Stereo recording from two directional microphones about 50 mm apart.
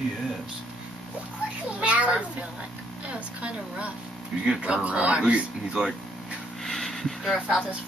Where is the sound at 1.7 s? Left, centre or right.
Right.